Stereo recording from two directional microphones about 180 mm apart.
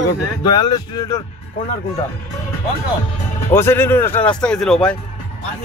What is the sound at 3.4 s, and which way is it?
Speech, 15° left (ahead or behind).